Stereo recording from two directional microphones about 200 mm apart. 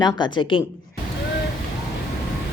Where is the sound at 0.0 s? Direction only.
20° left (ahead or behind).